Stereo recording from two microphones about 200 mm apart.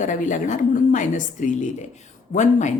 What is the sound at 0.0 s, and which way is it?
Speech, 40° left (ahead or behind).